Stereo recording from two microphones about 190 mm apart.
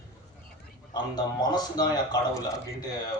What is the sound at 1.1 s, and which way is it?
Speech, 20° left (ahead or behind).